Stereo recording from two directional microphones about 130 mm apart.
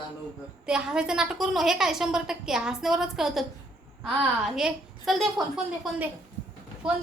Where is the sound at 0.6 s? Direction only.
5° right (ahead or behind).